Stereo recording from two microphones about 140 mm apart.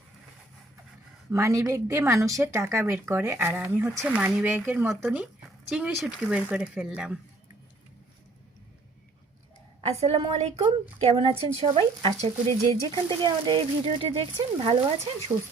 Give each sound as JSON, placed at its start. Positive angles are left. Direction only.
{"t": 1.3, "sound": "speech", "side_deg": -20}
{"t": 10.0, "sound": "speech", "side_deg": -45}
{"t": 12.7, "sound": "speech", "side_deg": -35}